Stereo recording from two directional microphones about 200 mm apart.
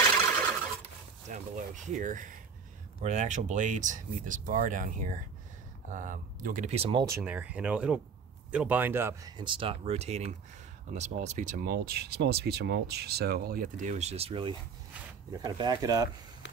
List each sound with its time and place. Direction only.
1.3 s speech: 40° right (ahead or behind)
7.1 s speech: 10° right (ahead or behind)
9.4 s speech: 25° right (ahead or behind)